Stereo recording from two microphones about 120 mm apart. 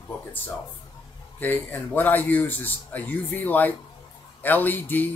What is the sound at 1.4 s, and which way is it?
Speech, 15° left (ahead or behind).